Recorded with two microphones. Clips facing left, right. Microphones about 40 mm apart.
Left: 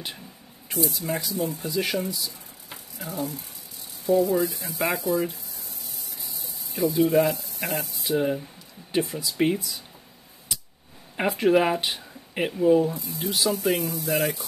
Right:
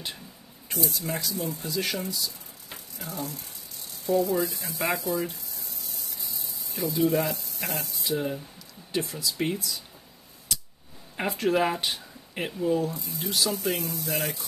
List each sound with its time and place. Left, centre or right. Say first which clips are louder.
0.7 s speech: left 3 dB; centre
10.5 s a sound: right 1 dB; centre
11.1 s speech: left 4 dB; centre
13.0 s speech: left 3 dB; centre